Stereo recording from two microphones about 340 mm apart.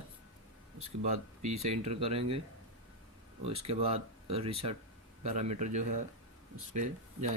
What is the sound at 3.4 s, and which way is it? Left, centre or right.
Speech, centre.